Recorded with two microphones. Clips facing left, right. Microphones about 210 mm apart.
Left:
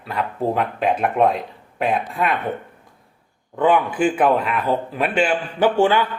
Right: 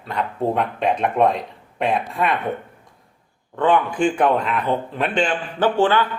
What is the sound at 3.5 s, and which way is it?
Speech, 5° left (ahead or behind).